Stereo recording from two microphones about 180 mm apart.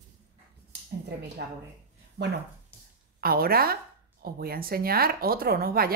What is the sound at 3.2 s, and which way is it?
Speech, 55° right (ahead or behind).